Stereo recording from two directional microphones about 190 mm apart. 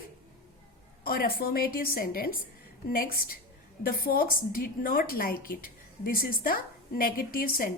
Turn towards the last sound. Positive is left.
turn(degrees=50)  # may be behind; listen again after turning